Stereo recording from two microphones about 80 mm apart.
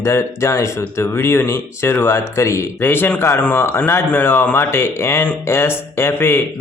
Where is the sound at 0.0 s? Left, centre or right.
Left.